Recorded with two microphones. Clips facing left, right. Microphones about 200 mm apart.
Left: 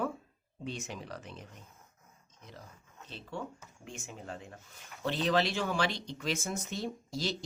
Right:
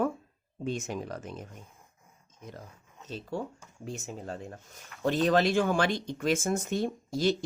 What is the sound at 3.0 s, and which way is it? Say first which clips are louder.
Speech: right 6 dB; 40° right (ahead or behind).